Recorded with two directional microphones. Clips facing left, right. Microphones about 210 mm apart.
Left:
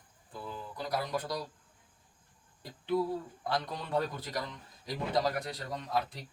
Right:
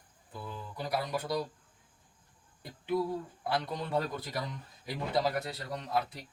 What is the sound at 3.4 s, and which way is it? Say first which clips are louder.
A man's voice: right 2 dB; 5° right (ahead or behind).